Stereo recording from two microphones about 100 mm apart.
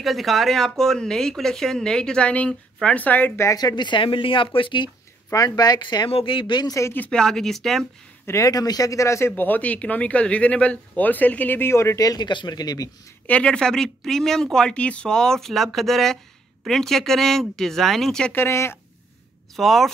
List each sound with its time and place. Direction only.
0.0 s speech: centre (ahead or behind); by 3.3 s 15° left (ahead or behind)
3.3 s speech: 35° left (ahead or behind); by 4.9 s 55° left (ahead or behind)
5.3 s speech: 40° left (ahead or behind)
6.1 s speech: 60° left (ahead or behind)
6.7 s speech: 30° left (ahead or behind)
7.0 s speech: 10° left (ahead or behind)
8.3 s speech: 35° left (ahead or behind)
9.3 s speech: 15° left (ahead or behind); by 12.3 s 35° left (ahead or behind)
12.3 s speech: 50° left (ahead or behind)
13.3 s speech: 10° left (ahead or behind)
18.3 s speech: 25° left (ahead or behind)
19.5 s speech: centre (ahead or behind)